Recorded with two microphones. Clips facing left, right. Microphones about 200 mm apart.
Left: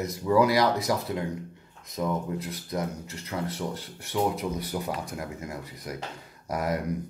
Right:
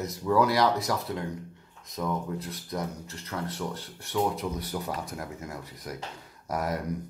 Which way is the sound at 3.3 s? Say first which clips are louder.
Left 2 dB; 20° left (ahead or behind).